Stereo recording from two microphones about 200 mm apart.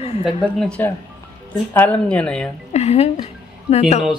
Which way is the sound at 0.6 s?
5° left (ahead or behind).